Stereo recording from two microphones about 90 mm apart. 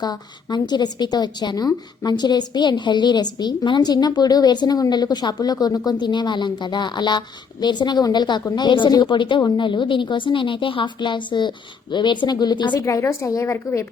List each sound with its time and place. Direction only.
0.0 s a woman's voice: 50° left (ahead or behind)
12.8 s a woman's voice: 35° left (ahead or behind)